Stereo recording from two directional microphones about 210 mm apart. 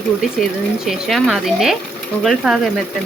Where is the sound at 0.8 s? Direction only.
Centre (ahead or behind).